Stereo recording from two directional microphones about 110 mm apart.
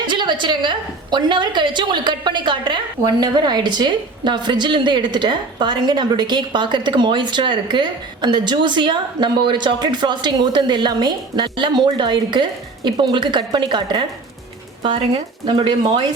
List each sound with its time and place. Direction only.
0.0 s a woman's voice: 45° right (ahead or behind)